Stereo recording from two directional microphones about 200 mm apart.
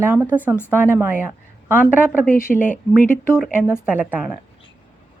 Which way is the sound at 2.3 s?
10° left (ahead or behind).